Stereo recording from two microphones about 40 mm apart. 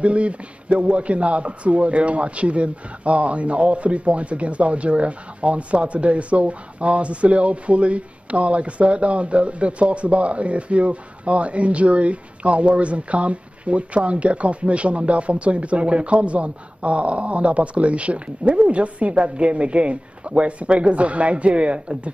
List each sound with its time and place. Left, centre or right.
0.0 s a man's voice: right